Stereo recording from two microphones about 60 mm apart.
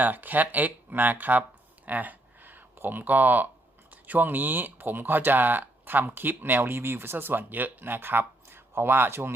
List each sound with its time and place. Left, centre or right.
0.0 s speech: right